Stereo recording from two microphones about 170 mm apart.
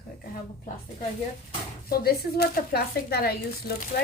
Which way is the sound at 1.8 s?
65° left (ahead or behind).